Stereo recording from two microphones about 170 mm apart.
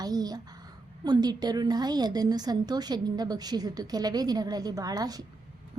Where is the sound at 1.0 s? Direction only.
25° right (ahead or behind).